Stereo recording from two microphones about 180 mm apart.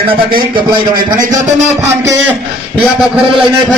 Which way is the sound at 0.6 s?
20° right (ahead or behind).